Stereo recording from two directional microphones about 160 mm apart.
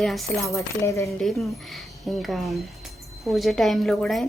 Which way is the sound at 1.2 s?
Centre (ahead or behind).